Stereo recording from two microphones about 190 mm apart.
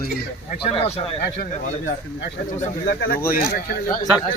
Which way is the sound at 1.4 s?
50° left (ahead or behind).